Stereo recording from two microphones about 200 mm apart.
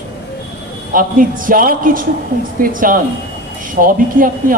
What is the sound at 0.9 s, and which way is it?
A woman's voice, 45° right (ahead or behind).